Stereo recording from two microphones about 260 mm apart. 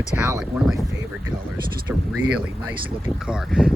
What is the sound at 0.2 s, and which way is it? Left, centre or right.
Speech, centre.